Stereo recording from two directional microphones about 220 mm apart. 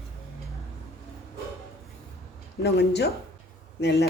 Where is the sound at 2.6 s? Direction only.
50° left (ahead or behind).